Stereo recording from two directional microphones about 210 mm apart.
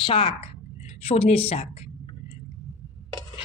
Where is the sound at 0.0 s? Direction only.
25° left (ahead or behind).